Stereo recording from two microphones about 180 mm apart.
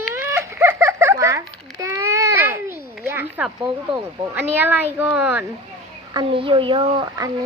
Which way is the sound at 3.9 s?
10° right (ahead or behind).